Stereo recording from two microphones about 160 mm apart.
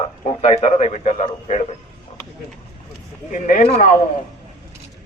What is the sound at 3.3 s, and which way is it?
Speech, 55° left (ahead or behind).